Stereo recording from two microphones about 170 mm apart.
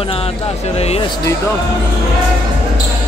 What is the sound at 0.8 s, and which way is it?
Speech, 35° left (ahead or behind).